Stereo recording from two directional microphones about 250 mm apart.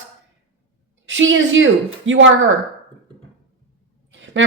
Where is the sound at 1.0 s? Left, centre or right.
Right.